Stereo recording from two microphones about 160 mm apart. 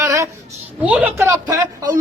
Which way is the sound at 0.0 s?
20° right (ahead or behind).